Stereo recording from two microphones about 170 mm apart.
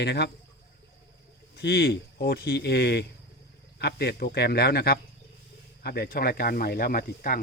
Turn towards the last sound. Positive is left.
turn(degrees=60)  # may be behind; listen again after turning